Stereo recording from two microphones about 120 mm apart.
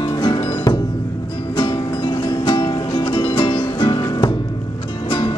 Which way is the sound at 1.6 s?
45° left (ahead or behind).